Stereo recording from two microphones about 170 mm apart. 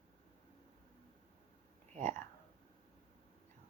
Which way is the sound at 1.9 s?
45° right (ahead or behind).